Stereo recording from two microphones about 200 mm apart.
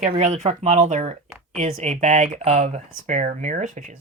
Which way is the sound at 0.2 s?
35° right (ahead or behind).